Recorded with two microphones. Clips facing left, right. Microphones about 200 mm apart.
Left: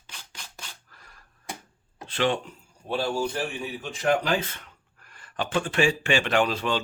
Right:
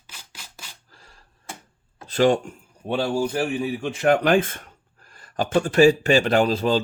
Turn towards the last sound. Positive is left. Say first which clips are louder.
# right 5 dB
turn(degrees=-35)  # may be behind; listen again after turning